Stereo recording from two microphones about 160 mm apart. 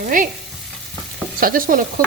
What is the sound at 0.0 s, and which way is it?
Stir, 55° right (ahead or behind).